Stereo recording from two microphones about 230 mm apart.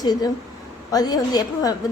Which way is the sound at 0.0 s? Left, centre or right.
Centre.